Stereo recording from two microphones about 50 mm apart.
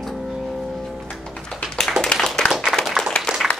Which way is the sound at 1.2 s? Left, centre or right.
Centre.